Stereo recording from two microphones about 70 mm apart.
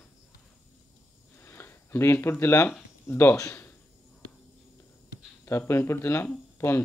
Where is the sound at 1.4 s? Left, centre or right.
Left.